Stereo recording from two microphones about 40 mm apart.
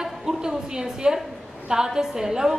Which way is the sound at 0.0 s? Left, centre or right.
Centre.